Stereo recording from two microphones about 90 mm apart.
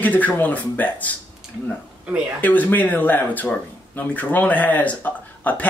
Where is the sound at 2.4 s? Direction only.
20° left (ahead or behind).